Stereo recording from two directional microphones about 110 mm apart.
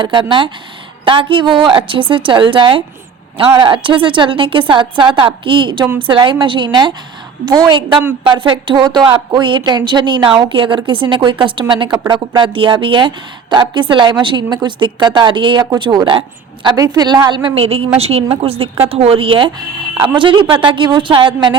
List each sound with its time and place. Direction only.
0.0 s a woman's voice: 45° right (ahead or behind)
17.5 s a woman's voice: 65° right (ahead or behind); by 21.5 s 45° right (ahead or behind)